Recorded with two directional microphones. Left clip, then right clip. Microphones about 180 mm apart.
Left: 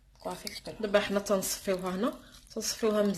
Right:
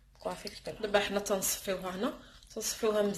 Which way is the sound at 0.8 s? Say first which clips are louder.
Left 2 dB; 45° left (ahead or behind).